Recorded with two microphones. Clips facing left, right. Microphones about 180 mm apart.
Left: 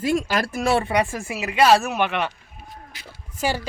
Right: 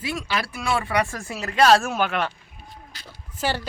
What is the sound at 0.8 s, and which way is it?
Speech, 15° left (ahead or behind).